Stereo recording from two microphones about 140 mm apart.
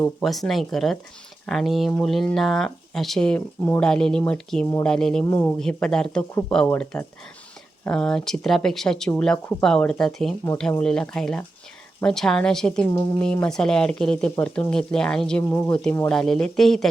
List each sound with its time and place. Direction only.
0.2 s speech: centre (ahead or behind)
5.2 s speech: 20° left (ahead or behind)
5.5 s speech: 5° left (ahead or behind)
16.0 s speech: 5° left (ahead or behind)